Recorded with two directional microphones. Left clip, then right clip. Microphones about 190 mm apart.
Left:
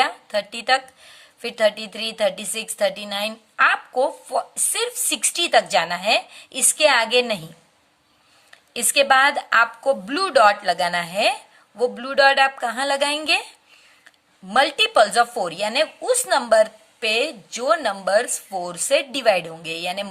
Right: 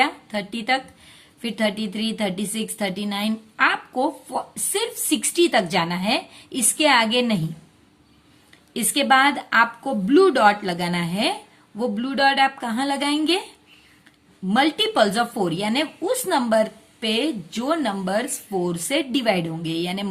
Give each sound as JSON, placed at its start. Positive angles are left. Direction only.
{"t": 0.0, "sound": "a woman's voice", "side_deg": 30}
{"t": 8.7, "sound": "a woman's voice", "side_deg": 30}